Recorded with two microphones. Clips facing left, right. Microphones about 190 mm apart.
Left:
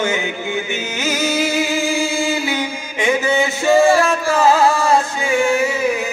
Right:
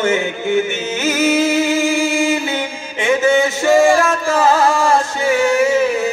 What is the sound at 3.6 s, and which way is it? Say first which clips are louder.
Music: even; 15° right (ahead or behind).